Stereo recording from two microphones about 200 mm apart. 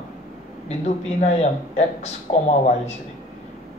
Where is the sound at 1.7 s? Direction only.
35° left (ahead or behind).